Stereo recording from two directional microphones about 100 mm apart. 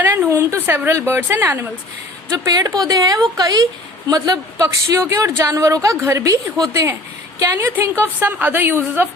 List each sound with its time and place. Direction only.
0.3 s a woman's voice: 25° right (ahead or behind)
2.3 s a woman's voice: 35° right (ahead or behind); by 9.0 s 20° right (ahead or behind)